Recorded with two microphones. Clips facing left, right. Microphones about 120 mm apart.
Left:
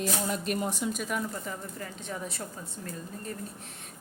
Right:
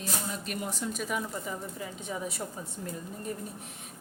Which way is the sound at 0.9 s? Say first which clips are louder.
Left 1 dB; centre (ahead or behind).